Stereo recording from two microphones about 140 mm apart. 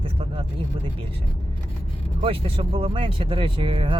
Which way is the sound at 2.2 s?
40° right (ahead or behind).